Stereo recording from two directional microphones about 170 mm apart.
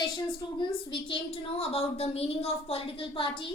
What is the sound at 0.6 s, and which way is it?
A woman's voice, 30° left (ahead or behind).